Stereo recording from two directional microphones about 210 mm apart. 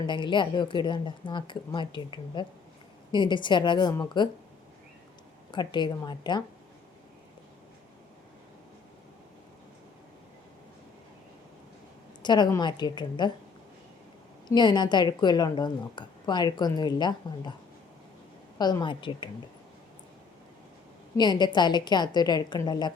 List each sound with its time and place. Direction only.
0.1 s speech: 20° left (ahead or behind)
5.5 s speech: 20° left (ahead or behind)
12.2 s speech: 20° left (ahead or behind)
14.4 s speech: 20° left (ahead or behind)
18.5 s speech: 20° left (ahead or behind)
21.2 s speech: 20° left (ahead or behind)